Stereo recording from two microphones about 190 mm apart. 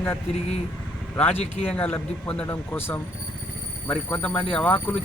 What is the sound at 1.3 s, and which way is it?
Speech, 35° left (ahead or behind).